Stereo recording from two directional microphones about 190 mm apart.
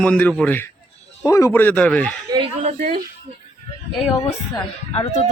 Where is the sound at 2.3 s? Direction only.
30° right (ahead or behind).